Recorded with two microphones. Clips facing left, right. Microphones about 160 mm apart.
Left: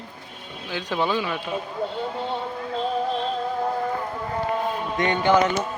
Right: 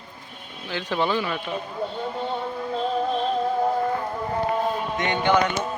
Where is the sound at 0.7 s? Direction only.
15° left (ahead or behind).